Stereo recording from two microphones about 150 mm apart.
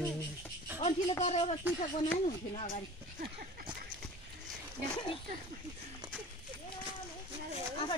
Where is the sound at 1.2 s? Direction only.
45° left (ahead or behind).